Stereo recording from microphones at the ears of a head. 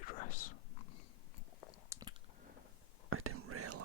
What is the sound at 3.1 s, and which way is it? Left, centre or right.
Whispering, right.